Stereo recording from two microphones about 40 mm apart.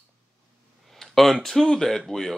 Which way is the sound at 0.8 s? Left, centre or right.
Centre.